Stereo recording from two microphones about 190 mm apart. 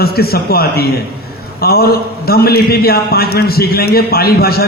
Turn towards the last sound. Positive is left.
turn(degrees=55)  # may be behind; listen again after turning